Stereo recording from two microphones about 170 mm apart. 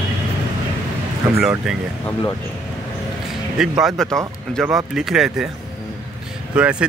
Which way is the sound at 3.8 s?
Centre (ahead or behind).